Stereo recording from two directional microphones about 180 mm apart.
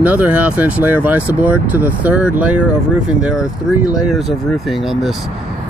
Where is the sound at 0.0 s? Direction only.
10° right (ahead or behind).